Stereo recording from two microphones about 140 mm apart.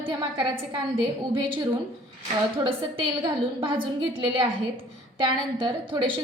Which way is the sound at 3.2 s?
35° right (ahead or behind).